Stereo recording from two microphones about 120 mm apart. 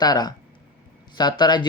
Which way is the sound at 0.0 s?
35° left (ahead or behind).